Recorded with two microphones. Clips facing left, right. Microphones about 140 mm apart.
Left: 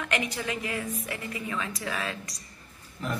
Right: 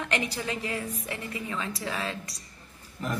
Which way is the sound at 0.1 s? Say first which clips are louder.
Left 1 dB; 30° right (ahead or behind).